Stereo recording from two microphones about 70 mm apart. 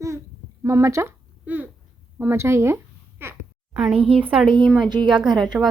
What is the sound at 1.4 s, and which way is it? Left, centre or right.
Speech, right.